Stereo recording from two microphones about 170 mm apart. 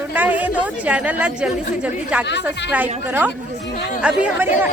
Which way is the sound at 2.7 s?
10° right (ahead or behind).